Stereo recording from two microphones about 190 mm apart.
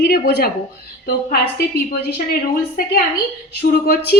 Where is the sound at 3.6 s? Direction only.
50° left (ahead or behind).